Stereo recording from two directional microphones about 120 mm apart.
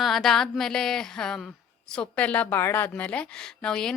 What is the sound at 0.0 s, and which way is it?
A woman's voice, centre (ahead or behind).